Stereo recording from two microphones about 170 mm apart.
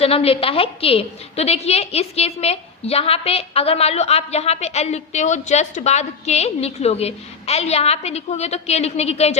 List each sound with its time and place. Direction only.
0.0 s a woman's voice: 35° left (ahead or behind)